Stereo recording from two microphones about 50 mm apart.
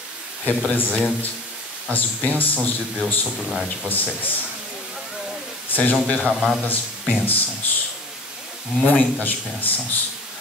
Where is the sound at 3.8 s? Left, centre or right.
Left.